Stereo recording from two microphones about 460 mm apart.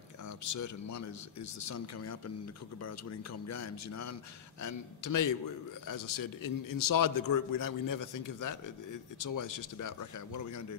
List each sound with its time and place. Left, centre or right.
0.4 s a man's voice: left